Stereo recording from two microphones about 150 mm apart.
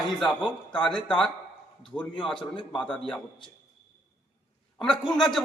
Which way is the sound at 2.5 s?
35° left (ahead or behind).